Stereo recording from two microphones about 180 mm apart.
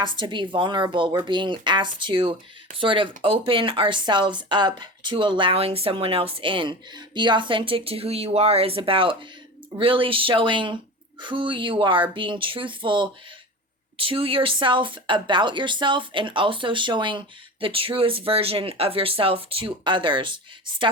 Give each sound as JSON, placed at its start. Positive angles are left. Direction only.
{"t": 0.0, "sound": "speech", "side_deg": -25}